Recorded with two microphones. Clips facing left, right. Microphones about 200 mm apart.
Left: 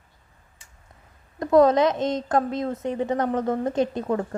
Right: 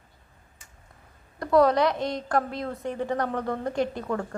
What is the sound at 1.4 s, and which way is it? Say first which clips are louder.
A woman's voice: left 3 dB; 20° left (ahead or behind).